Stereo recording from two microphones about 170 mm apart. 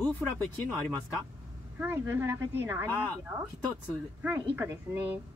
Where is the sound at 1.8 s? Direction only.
10° right (ahead or behind).